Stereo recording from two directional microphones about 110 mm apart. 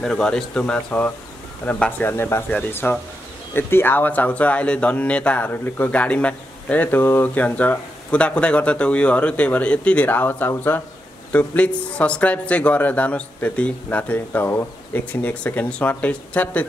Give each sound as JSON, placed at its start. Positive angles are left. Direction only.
{"t": 0.0, "sound": "speech", "side_deg": 5}